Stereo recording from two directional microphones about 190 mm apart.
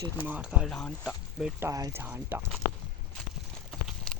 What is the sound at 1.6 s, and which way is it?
Speech, 15° right (ahead or behind).